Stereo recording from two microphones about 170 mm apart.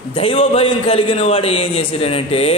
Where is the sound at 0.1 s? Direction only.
35° left (ahead or behind).